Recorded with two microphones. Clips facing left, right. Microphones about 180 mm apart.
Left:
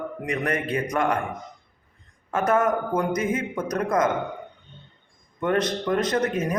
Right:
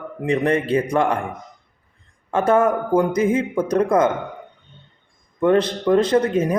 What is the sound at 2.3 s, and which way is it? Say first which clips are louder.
Speech: right 5 dB; 30° right (ahead or behind).